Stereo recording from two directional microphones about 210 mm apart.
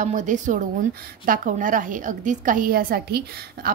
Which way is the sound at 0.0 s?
35° right (ahead or behind).